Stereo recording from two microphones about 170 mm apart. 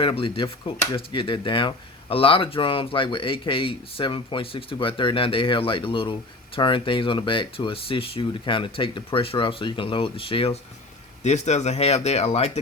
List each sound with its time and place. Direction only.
0.0 s speech: 30° left (ahead or behind)